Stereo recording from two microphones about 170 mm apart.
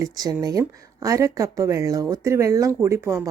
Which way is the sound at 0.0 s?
20° right (ahead or behind).